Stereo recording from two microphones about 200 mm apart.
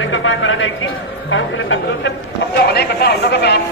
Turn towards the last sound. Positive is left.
turn(degrees=55)  # may be behind; listen again after turning